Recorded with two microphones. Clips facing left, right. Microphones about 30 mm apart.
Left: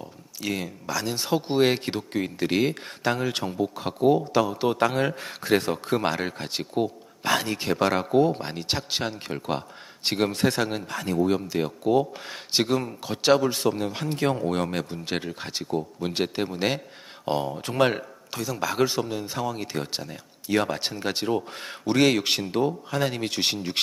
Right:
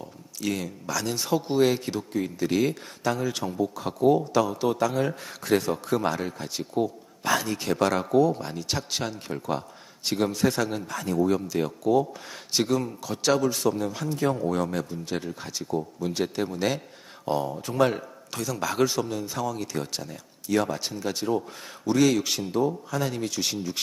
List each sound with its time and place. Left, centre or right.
0.0 s speech: centre; by 3.5 s left
3.6 s a man's voice: left
4.8 s speech: left
5.0 s a man's voice: left
7.6 s a man's voice: left
8.1 s speech: left
8.7 s speech: left
15.2 s speech: left
18.3 s speech: centre
19.2 s speech: left